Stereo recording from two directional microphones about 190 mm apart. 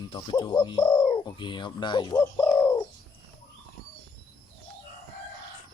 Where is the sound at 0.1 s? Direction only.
25° left (ahead or behind).